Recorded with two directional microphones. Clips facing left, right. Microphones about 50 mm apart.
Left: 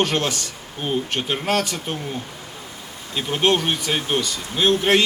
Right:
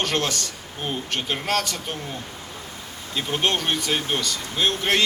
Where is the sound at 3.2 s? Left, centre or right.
Left.